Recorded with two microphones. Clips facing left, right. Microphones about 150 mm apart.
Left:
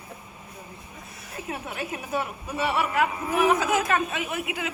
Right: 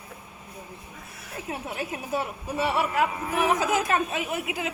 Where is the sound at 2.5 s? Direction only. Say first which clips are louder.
Even; 35° right (ahead or behind).